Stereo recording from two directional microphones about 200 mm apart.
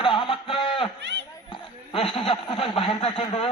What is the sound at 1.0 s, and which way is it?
Speech, 60° right (ahead or behind).